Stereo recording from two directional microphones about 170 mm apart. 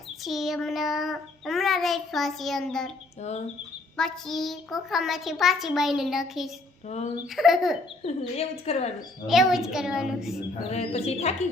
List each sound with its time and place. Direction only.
0.2 s child singing: centre (ahead or behind)
3.2 s a woman's voice: 40° left (ahead or behind)
3.9 s child singing: 5° left (ahead or behind)
6.8 s speech: 45° left (ahead or behind)
7.3 s child singing: centre (ahead or behind)
8.0 s a woman's voice: 40° left (ahead or behind)
9.2 s child singing: centre (ahead or behind)
10.7 s a woman's voice: 40° left (ahead or behind)